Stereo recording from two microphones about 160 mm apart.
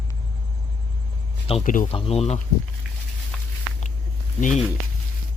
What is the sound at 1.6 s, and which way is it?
Speech, 55° left (ahead or behind).